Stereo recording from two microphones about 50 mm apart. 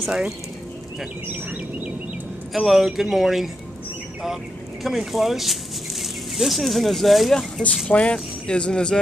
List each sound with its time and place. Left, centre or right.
2.5 s speech: centre
4.8 s speech: centre
7.9 s speech: centre